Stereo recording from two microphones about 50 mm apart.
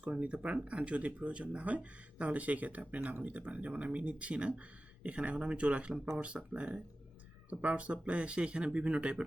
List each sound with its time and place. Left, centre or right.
0.0 s speech: right